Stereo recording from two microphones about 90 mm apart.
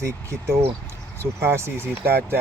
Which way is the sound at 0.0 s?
30° right (ahead or behind).